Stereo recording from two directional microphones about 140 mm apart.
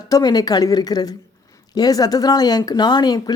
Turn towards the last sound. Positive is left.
turn(degrees=30)  # may be behind; listen again after turning